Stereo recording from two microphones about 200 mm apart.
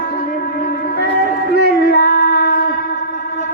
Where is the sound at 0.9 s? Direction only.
50° left (ahead or behind).